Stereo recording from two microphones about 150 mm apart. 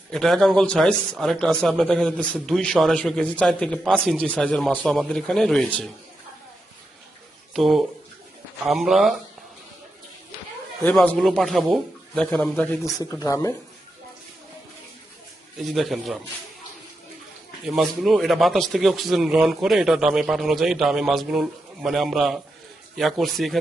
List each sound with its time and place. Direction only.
0.1 s speech: centre (ahead or behind)
7.5 s speech: centre (ahead or behind)
10.9 s speech: 10° left (ahead or behind)
13.0 s speech: 25° left (ahead or behind)
15.6 s speech: centre (ahead or behind)
17.7 s speech: centre (ahead or behind)